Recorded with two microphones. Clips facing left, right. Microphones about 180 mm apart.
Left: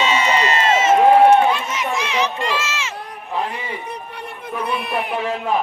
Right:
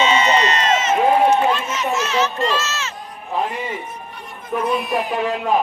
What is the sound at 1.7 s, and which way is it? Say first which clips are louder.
Run: right 2 dB; 15° left (ahead or behind).